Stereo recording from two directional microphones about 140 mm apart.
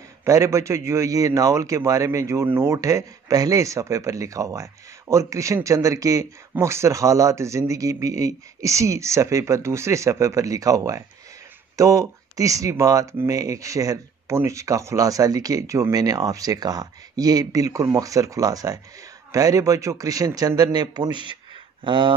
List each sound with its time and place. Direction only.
0.2 s speech: 20° right (ahead or behind)